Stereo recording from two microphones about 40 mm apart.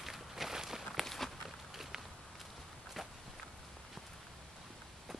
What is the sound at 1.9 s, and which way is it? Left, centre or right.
Walk, centre.